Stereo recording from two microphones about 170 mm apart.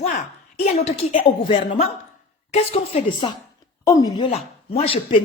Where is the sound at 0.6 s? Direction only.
40° left (ahead or behind).